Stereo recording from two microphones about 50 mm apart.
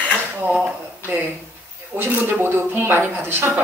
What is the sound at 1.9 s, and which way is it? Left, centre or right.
Speech, right.